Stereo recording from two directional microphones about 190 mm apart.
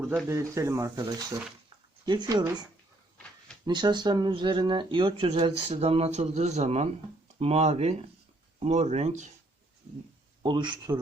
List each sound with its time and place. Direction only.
0.3 s speech: 15° right (ahead or behind)
3.7 s speech: 25° right (ahead or behind); by 9.3 s 40° right (ahead or behind)
10.4 s speech: 25° right (ahead or behind)